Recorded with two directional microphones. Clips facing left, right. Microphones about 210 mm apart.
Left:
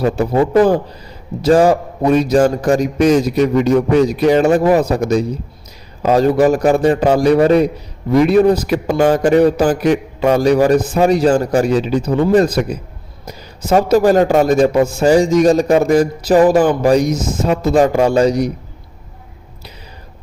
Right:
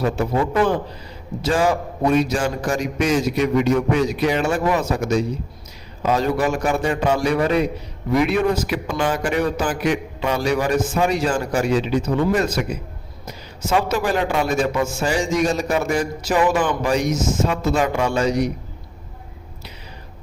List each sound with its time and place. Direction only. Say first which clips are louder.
0.0 s a man's voice: left 6 dB; 35° left (ahead or behind)
13.7 s a man's voice: left 9 dB; 40° left (ahead or behind)